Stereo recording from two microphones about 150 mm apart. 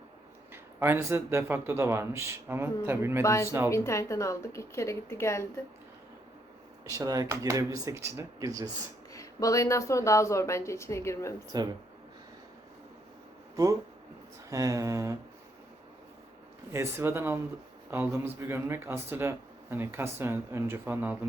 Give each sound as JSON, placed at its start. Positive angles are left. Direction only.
{"t": 0.5, "sound": "speech", "side_deg": -15}
{"t": 3.2, "sound": "speech", "side_deg": 20}
{"t": 6.8, "sound": "speech", "side_deg": -25}
{"t": 9.1, "sound": "speech", "side_deg": 20}
{"t": 14.5, "sound": "speech", "side_deg": -20}
{"t": 16.7, "sound": "speech", "side_deg": -15}